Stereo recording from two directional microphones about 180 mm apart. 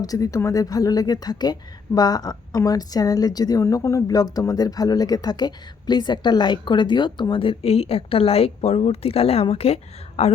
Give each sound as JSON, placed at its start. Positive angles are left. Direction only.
{"t": 0.0, "sound": "a woman's voice", "side_deg": 20}